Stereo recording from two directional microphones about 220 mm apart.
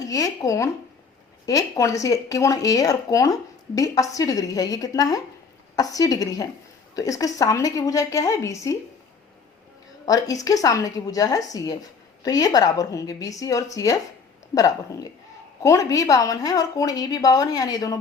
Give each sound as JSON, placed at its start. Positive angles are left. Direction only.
{"t": 0.0, "sound": "speech", "side_deg": 15}
{"t": 10.4, "sound": "speech", "side_deg": 15}